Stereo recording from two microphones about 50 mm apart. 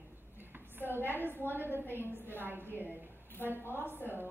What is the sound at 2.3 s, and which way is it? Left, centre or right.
Speech, right.